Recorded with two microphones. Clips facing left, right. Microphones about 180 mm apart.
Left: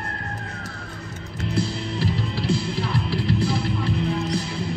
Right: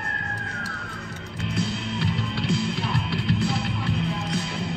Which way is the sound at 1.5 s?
30° left (ahead or behind).